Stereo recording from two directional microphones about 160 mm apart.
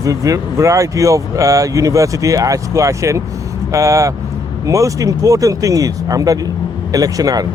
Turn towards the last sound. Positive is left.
turn(degrees=-25)  # may be behind; listen again after turning